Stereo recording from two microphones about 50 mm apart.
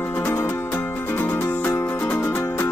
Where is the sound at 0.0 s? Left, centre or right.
Left.